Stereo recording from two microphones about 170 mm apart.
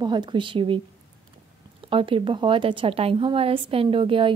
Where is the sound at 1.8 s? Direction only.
30° right (ahead or behind).